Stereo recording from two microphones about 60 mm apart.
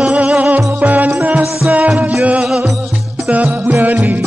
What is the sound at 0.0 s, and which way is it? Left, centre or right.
Music, centre.